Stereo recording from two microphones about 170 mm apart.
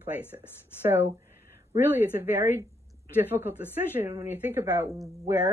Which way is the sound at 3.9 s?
15° right (ahead or behind).